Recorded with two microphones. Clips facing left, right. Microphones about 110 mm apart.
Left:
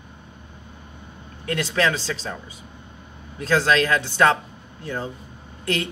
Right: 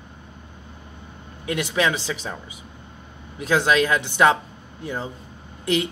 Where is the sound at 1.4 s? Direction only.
15° right (ahead or behind).